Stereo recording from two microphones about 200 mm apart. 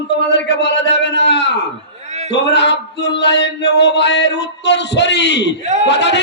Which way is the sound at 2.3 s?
60° left (ahead or behind).